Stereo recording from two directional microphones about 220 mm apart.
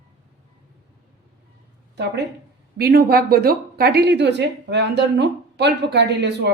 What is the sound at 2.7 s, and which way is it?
A woman's voice, 45° right (ahead or behind).